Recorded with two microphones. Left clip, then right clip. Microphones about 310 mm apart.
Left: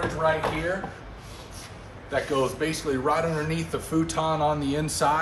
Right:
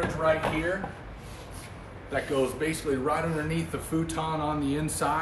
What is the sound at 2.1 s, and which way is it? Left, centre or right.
A man's voice, centre.